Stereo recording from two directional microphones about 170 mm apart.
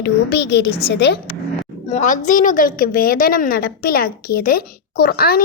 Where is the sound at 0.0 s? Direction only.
85° left.